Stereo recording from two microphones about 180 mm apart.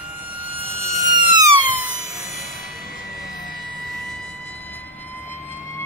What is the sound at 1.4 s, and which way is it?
Siren, 10° right (ahead or behind).